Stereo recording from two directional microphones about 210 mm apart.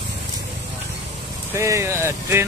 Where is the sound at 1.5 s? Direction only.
15° right (ahead or behind).